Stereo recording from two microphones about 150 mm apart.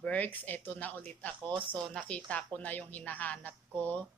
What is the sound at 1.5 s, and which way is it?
Speech, 35° right (ahead or behind).